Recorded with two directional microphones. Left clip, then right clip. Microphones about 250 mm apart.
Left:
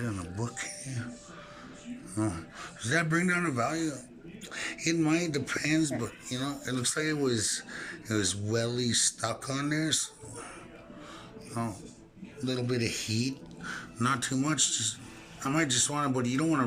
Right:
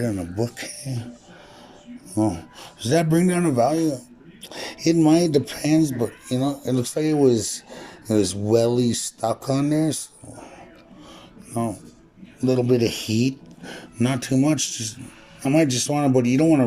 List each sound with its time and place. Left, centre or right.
0.0 s speech: centre
2.1 s speech: centre
4.7 s speech: right
4.9 s speech: centre
12.7 s speech: centre